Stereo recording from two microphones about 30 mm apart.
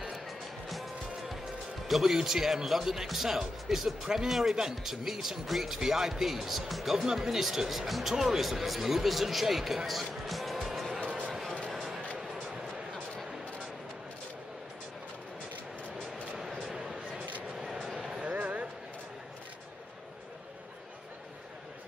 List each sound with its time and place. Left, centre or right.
1.9 s speech: centre
8.1 s speech: centre
8.4 s speech: centre
9.8 s music: centre
12.2 s music: centre
16.7 s a sound: centre
18.2 s a sound: right